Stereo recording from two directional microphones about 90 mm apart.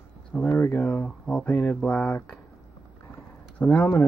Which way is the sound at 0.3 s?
20° left (ahead or behind).